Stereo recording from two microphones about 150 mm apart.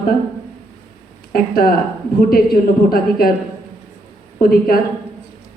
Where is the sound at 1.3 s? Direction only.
80° left.